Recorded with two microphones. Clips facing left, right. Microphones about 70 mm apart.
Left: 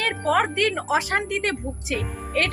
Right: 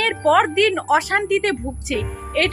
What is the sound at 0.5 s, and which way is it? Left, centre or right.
A woman's voice, right.